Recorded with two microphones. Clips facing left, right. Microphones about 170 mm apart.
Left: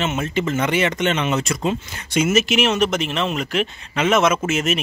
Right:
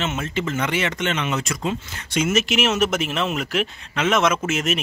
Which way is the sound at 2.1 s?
5° left (ahead or behind).